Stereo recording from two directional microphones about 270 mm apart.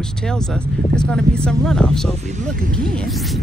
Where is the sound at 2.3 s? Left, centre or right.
Right.